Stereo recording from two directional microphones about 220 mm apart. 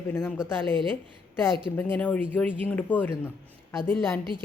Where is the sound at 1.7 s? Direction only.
5° left (ahead or behind).